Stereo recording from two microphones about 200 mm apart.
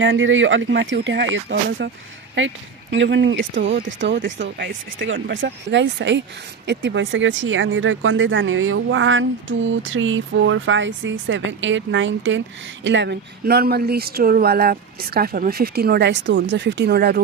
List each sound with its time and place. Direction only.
0.0 s speech: 70° right (ahead or behind)
2.9 s speech: 65° right (ahead or behind)